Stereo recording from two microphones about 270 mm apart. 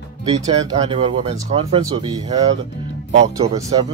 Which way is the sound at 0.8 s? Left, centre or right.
Centre.